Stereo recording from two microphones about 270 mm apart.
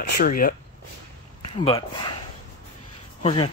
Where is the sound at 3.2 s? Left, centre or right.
Left.